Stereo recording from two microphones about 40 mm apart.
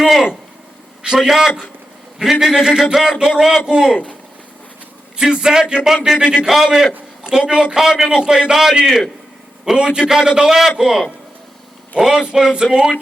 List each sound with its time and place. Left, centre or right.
0.0 s a man's voice: centre
5.1 s a man's voice: right